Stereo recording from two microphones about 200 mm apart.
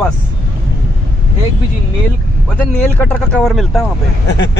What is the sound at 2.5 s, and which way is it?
Speech, 5° left (ahead or behind).